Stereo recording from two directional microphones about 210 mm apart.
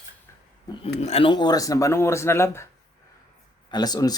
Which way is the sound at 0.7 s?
30° left (ahead or behind).